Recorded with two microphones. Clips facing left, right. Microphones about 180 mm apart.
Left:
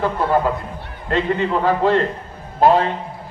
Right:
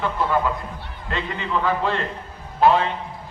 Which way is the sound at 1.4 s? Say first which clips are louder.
Left 1 dB; 40° left (ahead or behind).